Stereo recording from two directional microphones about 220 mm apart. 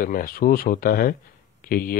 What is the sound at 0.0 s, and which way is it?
Speech, 40° left (ahead or behind).